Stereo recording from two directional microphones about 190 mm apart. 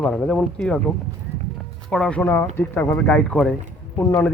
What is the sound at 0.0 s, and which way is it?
Speech, 5° left (ahead or behind).